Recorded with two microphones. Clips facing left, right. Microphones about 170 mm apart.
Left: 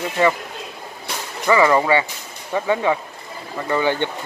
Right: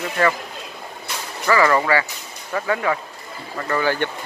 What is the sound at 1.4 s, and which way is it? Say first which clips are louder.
Speech: left 2 dB; 20° left (ahead or behind).